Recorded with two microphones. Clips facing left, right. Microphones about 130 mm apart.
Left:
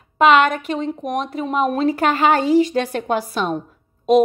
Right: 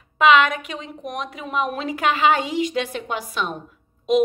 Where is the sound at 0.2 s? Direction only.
40° left (ahead or behind).